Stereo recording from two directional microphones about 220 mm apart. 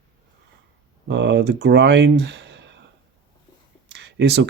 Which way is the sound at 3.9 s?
50° right (ahead or behind).